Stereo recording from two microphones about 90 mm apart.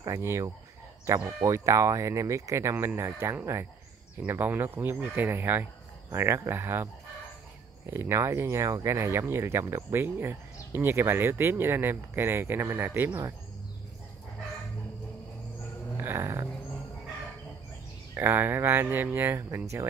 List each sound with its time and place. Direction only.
0.0 s speech: 35° right (ahead or behind)
16.0 s a sound: 30° right (ahead or behind)
18.1 s speech: 20° right (ahead or behind)